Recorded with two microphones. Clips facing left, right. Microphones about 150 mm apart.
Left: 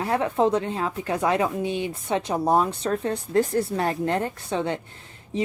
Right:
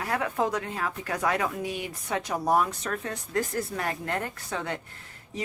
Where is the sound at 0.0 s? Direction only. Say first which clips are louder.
Left 6 dB; 25° left (ahead or behind).